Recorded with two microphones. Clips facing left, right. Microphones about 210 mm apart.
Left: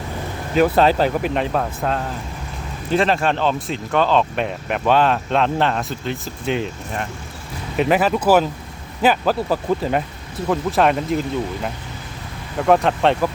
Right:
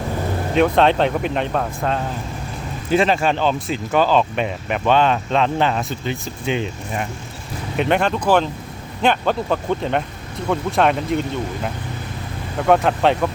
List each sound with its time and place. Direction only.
0.5 s speech: centre (ahead or behind)